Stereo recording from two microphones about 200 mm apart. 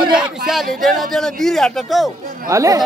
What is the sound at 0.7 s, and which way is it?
Speech, centre (ahead or behind).